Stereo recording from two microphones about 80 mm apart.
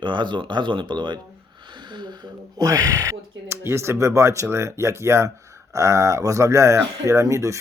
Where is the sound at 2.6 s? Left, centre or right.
Right.